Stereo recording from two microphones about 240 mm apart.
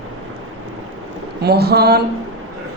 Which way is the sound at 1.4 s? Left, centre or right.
Right.